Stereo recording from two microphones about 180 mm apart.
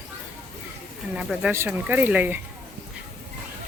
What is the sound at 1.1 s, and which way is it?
Speech, 5° right (ahead or behind).